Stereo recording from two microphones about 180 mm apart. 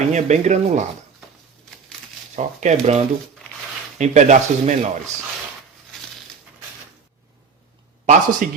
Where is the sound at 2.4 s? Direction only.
40° right (ahead or behind).